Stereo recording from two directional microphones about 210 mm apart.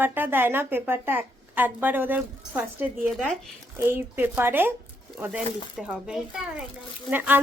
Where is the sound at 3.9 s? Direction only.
10° right (ahead or behind).